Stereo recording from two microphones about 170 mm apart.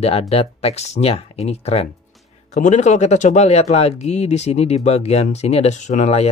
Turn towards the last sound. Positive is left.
turn(degrees=40)  # may be behind; listen again after turning